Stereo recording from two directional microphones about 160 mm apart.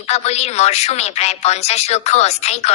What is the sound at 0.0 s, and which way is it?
A woman's voice, 40° left (ahead or behind).